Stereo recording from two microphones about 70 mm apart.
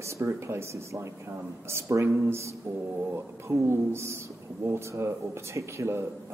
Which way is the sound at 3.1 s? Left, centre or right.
Right.